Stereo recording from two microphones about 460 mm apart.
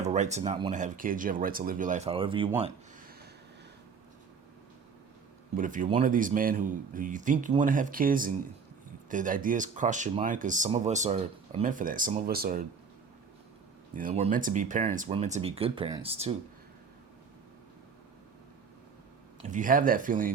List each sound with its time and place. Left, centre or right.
0.0 s speech: centre
5.5 s speech: centre
13.9 s speech: centre
19.5 s speech: centre